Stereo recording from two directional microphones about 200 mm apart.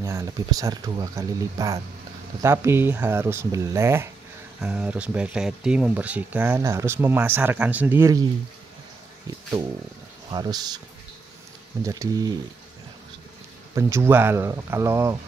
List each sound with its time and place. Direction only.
0.0 s speech: 15° right (ahead or behind)
10.3 s speech: 20° right (ahead or behind)
11.8 s speech: 15° right (ahead or behind)
13.7 s speech: 15° right (ahead or behind)